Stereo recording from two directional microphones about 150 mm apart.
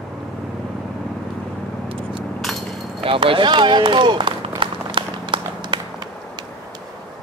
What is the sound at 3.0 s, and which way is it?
Run, 35° right (ahead or behind).